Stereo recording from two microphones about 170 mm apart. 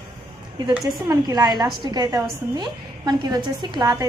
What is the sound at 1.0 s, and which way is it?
A woman's voice, 20° right (ahead or behind).